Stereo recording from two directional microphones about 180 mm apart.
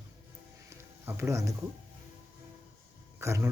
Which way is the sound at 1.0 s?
15° right (ahead or behind).